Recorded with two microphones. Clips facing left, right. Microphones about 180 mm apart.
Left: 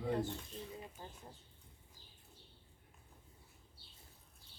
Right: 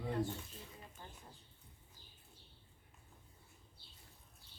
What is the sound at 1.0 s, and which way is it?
Speech, 35° left (ahead or behind).